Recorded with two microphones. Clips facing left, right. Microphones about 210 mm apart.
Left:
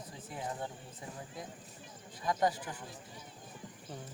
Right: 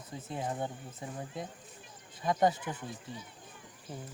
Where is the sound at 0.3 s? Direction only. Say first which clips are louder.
Right 4 dB; 25° right (ahead or behind).